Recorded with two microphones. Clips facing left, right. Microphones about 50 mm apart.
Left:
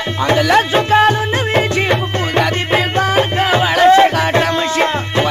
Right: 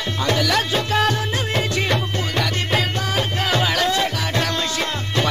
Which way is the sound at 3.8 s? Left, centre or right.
Left.